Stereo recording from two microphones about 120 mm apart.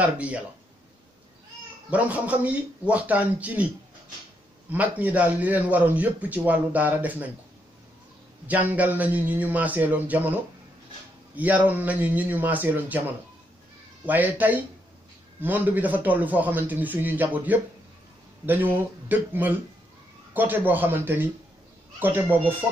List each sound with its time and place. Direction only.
0.0 s a man's voice: 10° right (ahead or behind)
1.9 s a man's voice: 10° right (ahead or behind)
4.6 s a man's voice: 15° right (ahead or behind)
8.5 s a man's voice: 15° right (ahead or behind)
14.0 s a man's voice: 15° right (ahead or behind)